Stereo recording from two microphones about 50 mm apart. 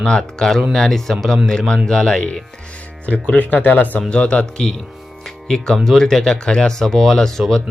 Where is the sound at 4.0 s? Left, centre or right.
Left.